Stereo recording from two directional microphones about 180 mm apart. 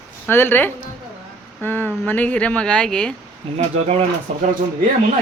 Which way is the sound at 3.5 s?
35° right (ahead or behind).